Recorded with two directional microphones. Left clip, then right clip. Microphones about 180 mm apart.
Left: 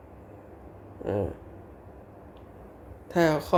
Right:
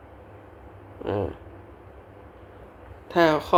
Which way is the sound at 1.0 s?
15° left (ahead or behind).